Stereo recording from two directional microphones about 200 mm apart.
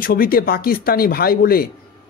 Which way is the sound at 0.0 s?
45° left (ahead or behind).